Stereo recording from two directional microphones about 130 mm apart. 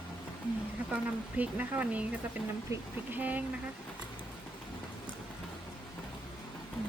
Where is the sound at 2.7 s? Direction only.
25° right (ahead or behind).